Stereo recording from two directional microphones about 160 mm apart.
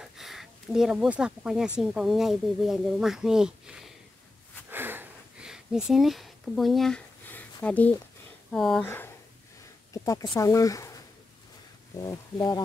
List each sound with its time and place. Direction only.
0.0 s speech: centre (ahead or behind)
4.6 s sniff: 15° right (ahead or behind)
7.2 s a sound: 10° left (ahead or behind)
8.5 s speech: centre (ahead or behind)
8.8 s speech: 15° left (ahead or behind)
12.0 s speech: 25° left (ahead or behind)